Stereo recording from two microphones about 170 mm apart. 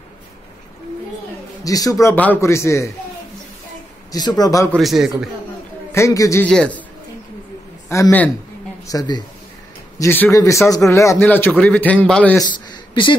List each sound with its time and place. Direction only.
1.6 s speech: 20° left (ahead or behind)
4.1 s speech: 20° left (ahead or behind)
4.7 s a man's voice: centre (ahead or behind)
5.9 s a man's voice: 15° left (ahead or behind)
6.4 s speech: 5° left (ahead or behind)
7.9 s speech: 15° left (ahead or behind)
9.9 s speech: 10° left (ahead or behind)